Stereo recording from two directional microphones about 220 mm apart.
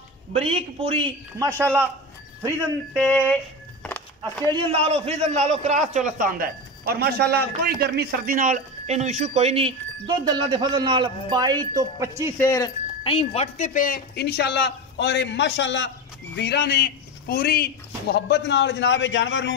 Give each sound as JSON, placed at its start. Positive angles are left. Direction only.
{"t": 0.3, "sound": "a man's voice", "side_deg": -25}
{"t": 1.4, "sound": "speech", "side_deg": -10}
{"t": 3.0, "sound": "a sound", "side_deg": 5}
{"t": 4.5, "sound": "a man's voice", "side_deg": -25}
{"t": 12.4, "sound": "speech", "side_deg": 15}